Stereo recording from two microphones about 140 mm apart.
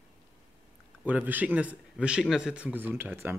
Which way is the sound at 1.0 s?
10° right (ahead or behind).